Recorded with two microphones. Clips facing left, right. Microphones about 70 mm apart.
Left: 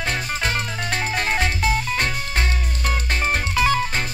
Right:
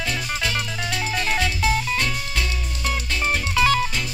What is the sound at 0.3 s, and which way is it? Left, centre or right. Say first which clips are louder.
Music: left 1 dB; left.